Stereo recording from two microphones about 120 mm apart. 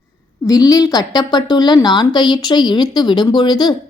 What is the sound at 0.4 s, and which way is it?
A woman's voice, 30° left (ahead or behind).